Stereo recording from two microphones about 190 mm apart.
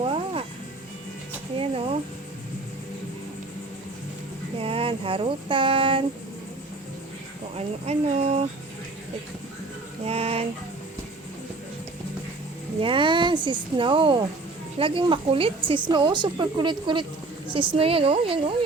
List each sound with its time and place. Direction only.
0.0 s music: 30° right (ahead or behind)
1.5 s a sound: 30° right (ahead or behind)
4.6 s child singing: 30° right (ahead or behind)
7.5 s speech: 35° right (ahead or behind)
10.0 s a sound: 30° right (ahead or behind)
12.8 s a woman's voice: 25° right (ahead or behind)